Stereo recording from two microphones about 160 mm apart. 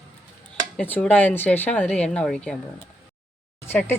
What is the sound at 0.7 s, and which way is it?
Speech, 10° left (ahead or behind).